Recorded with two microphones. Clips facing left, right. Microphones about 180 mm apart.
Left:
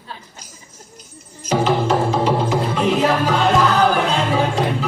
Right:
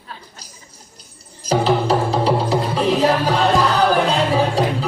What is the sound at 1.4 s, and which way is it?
Music, 35° right (ahead or behind).